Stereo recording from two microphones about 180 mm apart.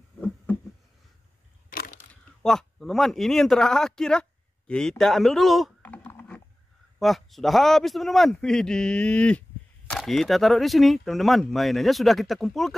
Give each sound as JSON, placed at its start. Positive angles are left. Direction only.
{"t": 1.7, "sound": "crushing", "side_deg": 55}
{"t": 2.4, "sound": "a man's voice", "side_deg": 0}